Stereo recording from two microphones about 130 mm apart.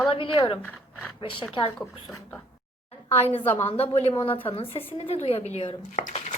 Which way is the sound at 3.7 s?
50° left (ahead or behind).